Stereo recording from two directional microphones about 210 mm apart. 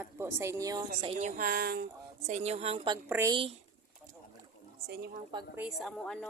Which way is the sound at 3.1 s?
10° right (ahead or behind).